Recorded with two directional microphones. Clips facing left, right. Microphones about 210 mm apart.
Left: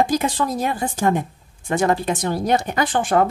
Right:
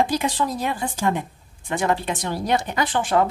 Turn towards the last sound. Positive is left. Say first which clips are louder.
# left 2 dB
turn(degrees=45)  # may be behind; listen again after turning